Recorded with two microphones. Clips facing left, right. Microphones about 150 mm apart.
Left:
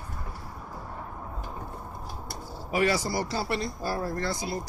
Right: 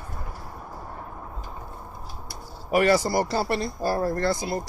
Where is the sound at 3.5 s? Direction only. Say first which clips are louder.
Right 5 dB; 40° right (ahead or behind).